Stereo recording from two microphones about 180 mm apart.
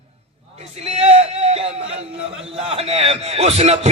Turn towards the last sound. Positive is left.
turn(degrees=-35)  # may be behind; listen again after turning